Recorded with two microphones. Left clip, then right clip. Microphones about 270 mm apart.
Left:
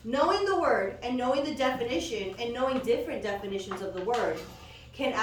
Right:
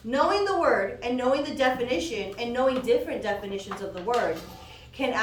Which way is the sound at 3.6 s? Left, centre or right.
Right.